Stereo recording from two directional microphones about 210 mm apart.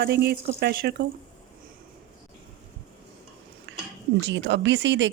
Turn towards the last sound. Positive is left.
turn(degrees=-60)  # may be behind; listen again after turning